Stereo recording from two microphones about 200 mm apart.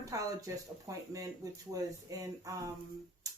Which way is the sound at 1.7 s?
15° right (ahead or behind).